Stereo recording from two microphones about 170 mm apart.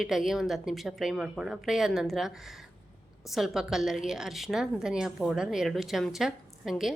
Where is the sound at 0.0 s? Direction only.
Centre (ahead or behind).